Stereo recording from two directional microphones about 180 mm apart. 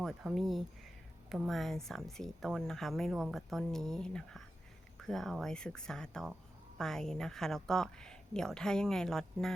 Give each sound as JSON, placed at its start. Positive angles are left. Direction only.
{"t": 0.0, "sound": "speech", "side_deg": -5}